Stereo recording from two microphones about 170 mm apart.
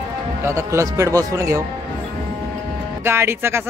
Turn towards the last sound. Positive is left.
turn(degrees=-15)  # may be behind; listen again after turning